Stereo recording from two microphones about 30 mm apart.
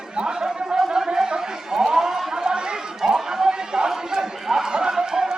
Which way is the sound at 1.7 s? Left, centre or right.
Centre.